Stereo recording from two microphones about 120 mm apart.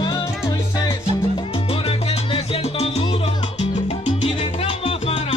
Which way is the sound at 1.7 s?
50° left (ahead or behind).